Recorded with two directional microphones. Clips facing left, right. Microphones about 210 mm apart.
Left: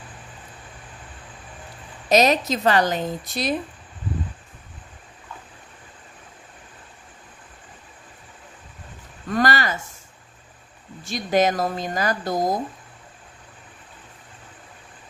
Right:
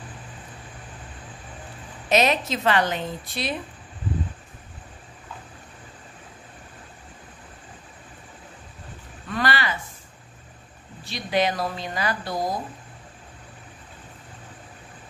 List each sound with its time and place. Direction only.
2.0 s a woman's voice: 40° left (ahead or behind)
9.3 s speech: 45° left (ahead or behind)
11.1 s a woman's voice: 45° left (ahead or behind)